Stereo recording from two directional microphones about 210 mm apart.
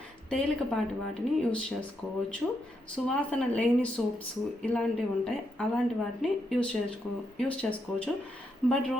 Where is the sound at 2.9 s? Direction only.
5° left (ahead or behind).